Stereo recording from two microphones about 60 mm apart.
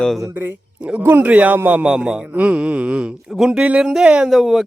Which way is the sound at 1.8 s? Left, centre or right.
Centre.